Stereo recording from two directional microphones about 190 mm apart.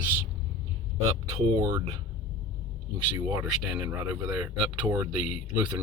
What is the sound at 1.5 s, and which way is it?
Speech, 20° right (ahead or behind).